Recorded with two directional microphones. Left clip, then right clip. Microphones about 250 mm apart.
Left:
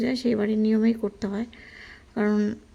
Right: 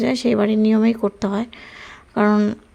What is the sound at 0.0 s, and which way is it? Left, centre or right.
Speech, centre.